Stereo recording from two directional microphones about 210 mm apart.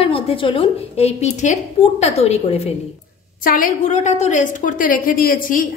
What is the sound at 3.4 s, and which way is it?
A woman's voice, 40° left (ahead or behind).